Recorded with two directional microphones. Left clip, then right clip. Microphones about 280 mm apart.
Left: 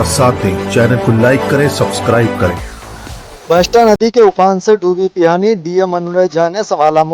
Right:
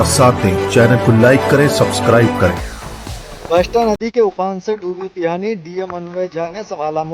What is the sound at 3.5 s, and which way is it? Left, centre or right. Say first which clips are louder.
Speech: left 5 dB; left.